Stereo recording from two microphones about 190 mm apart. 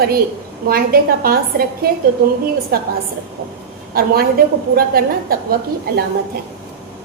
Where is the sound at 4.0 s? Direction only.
50° right (ahead or behind).